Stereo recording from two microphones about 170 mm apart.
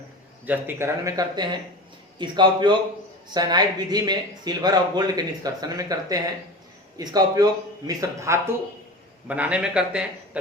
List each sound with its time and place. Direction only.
0.4 s speech: 10° right (ahead or behind)
9.2 s speech: 10° right (ahead or behind)